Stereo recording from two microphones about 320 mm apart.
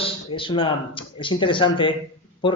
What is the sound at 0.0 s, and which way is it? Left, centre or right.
Speech, centre.